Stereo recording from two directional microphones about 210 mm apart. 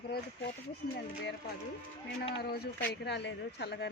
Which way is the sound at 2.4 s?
50° left (ahead or behind).